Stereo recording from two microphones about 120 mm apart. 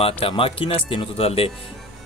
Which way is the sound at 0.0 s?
50° left (ahead or behind).